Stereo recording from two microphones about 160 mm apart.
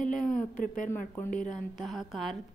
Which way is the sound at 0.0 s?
55° left (ahead or behind).